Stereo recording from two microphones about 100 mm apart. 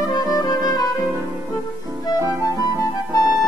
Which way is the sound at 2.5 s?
35° left (ahead or behind).